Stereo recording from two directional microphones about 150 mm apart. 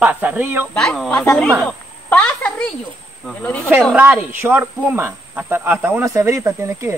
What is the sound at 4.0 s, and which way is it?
Speech, 10° right (ahead or behind).